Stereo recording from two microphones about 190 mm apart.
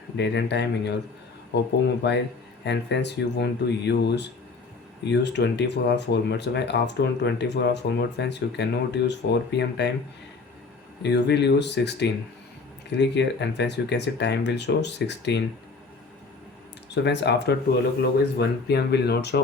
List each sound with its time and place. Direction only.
0.2 s speech: 65° left (ahead or behind)
11.0 s speech: 65° left (ahead or behind)
16.9 s speech: 65° left (ahead or behind)